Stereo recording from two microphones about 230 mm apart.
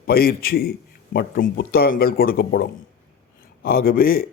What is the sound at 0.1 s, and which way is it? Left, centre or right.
A man's voice, left.